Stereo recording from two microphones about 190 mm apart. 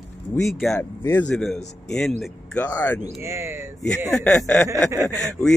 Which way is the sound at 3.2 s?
15° right (ahead or behind).